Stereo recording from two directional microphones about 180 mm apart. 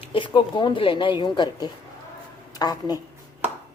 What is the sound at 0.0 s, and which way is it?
A woman's voice, 30° left (ahead or behind).